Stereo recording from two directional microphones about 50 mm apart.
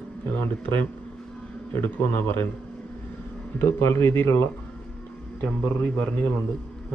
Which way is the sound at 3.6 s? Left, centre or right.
Left.